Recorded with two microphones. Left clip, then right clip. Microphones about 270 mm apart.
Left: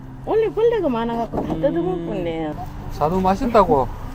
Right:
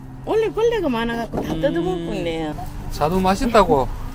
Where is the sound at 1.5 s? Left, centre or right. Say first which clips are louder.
Right 1 dB; right.